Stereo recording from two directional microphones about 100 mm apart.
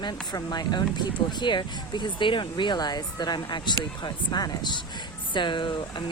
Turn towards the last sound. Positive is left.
turn(degrees=50)  # may be behind; listen again after turning